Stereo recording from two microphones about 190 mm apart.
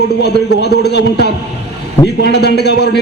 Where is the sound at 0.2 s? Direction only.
60° left (ahead or behind).